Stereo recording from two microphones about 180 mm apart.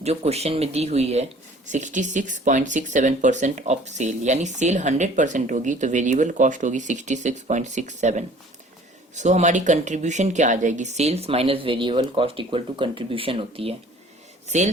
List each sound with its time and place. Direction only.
0.0 s a woman's voice: 35° right (ahead or behind)